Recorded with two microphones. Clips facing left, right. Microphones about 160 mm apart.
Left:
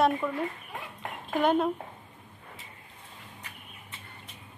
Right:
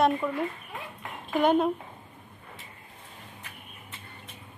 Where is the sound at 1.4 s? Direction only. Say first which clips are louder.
Right 2 dB; centre (ahead or behind).